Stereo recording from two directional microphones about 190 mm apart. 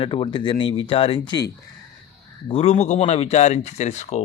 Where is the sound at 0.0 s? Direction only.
25° left (ahead or behind).